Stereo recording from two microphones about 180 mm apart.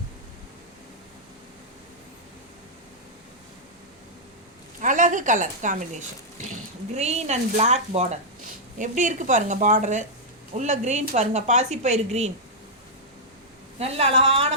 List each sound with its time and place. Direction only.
4.8 s a woman's voice: 45° right (ahead or behind)
13.7 s speech: 35° right (ahead or behind)